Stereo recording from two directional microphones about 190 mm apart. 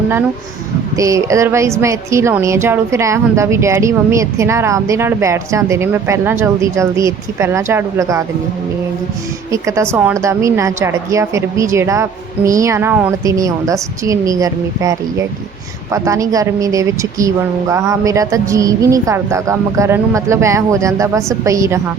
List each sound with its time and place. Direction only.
0.9 s speech: 15° right (ahead or behind)
9.5 s speech: 15° right (ahead or behind)